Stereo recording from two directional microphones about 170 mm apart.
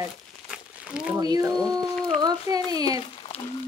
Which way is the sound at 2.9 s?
30° left (ahead or behind).